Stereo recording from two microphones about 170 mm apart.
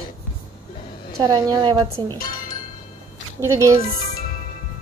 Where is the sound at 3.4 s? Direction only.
15° right (ahead or behind).